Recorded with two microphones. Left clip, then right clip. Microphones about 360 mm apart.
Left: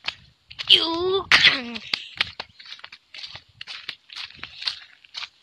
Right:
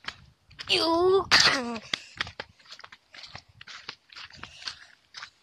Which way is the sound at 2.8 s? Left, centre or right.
Centre.